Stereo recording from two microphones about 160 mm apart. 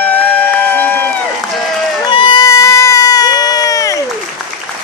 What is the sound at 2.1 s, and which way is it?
Baby cry, 30° left (ahead or behind).